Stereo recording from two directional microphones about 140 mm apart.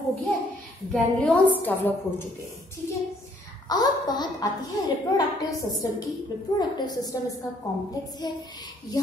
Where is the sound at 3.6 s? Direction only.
30° left (ahead or behind).